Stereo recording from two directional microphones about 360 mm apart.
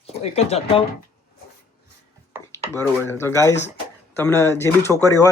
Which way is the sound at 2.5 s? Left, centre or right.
Centre.